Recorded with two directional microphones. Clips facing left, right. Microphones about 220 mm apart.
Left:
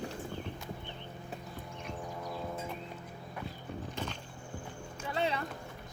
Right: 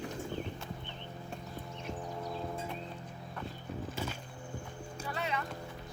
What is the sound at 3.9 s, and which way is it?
Music, 10° right (ahead or behind).